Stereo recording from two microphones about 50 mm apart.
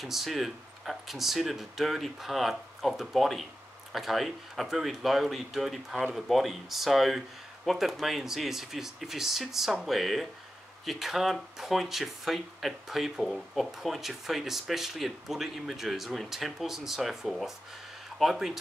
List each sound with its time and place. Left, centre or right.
0.0 s speech: centre